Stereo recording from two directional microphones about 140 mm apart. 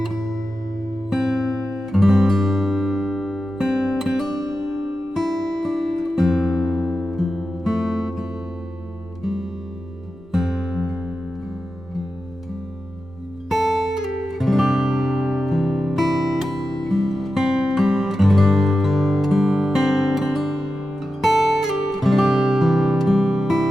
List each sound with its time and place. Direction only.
0.0 s music: centre (ahead or behind)
4.4 s music: 25° right (ahead or behind)
4.6 s music: centre (ahead or behind)
13.5 s music: centre (ahead or behind)